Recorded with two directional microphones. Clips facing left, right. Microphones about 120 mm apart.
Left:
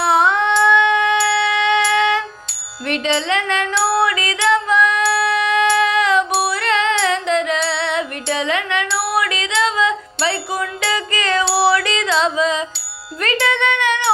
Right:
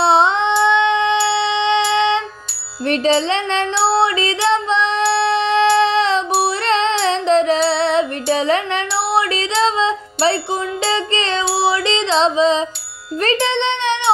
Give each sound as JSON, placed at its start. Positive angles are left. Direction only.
{"t": 0.0, "sound": "a sound", "side_deg": -25}
{"t": 2.8, "sound": "music", "side_deg": -30}
{"t": 11.5, "sound": "carnatic music", "side_deg": -20}
{"t": 13.2, "sound": "a child's voice", "side_deg": -25}